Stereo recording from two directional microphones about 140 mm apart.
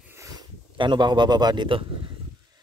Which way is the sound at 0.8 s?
35° right (ahead or behind).